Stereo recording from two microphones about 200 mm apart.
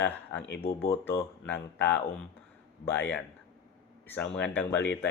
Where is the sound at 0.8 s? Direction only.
15° left (ahead or behind).